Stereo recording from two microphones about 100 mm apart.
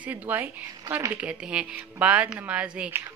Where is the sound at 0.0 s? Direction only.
15° right (ahead or behind).